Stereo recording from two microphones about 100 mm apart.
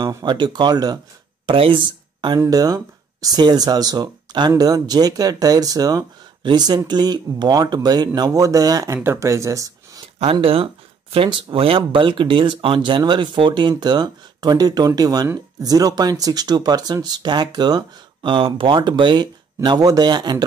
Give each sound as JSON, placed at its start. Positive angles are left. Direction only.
{"t": 0.0, "sound": "speech", "side_deg": -45}
{"t": 1.4, "sound": "speech", "side_deg": -55}
{"t": 2.5, "sound": "speech", "side_deg": -40}
{"t": 10.4, "sound": "speech", "side_deg": -70}
{"t": 18.3, "sound": "speech", "side_deg": -60}